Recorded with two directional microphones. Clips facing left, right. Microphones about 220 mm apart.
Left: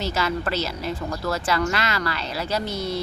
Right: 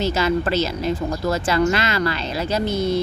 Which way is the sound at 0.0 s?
20° right (ahead or behind).